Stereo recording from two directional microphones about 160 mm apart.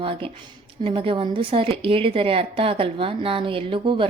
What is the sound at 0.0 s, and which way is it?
A woman's voice, 35° right (ahead or behind).